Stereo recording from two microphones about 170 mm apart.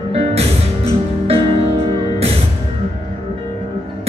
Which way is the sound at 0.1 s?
40° right (ahead or behind).